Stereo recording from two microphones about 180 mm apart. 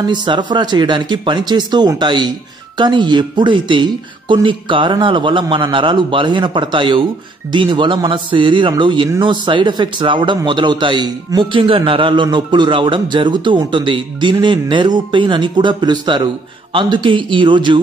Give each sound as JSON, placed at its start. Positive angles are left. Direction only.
{"t": 0.0, "sound": "a man's voice", "side_deg": -25}